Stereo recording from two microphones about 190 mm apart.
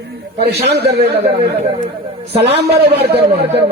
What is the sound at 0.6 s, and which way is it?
Speech, 60° right (ahead or behind).